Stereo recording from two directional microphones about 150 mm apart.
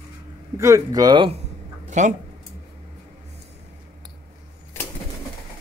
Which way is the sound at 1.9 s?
55° right (ahead or behind).